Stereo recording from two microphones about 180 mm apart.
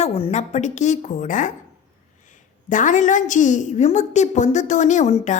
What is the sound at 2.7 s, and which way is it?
A woman's voice, 45° left (ahead or behind).